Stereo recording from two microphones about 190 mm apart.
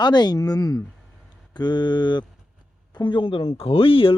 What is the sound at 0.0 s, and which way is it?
A man's voice, 20° left (ahead or behind).